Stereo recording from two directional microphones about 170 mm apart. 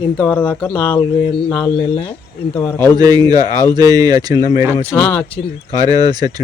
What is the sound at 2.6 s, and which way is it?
Speech, 15° left (ahead or behind).